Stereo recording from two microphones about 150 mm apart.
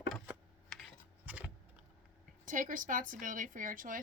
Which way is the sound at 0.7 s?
Centre (ahead or behind).